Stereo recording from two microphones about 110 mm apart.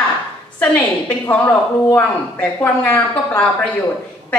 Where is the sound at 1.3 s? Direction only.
15° left (ahead or behind).